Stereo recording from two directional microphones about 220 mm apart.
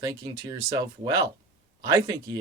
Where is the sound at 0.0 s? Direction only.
15° right (ahead or behind).